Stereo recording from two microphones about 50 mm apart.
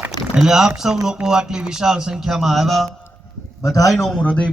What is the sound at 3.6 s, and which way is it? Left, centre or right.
Speech, left.